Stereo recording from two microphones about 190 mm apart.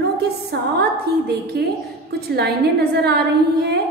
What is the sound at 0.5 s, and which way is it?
Mantra, 60° right (ahead or behind).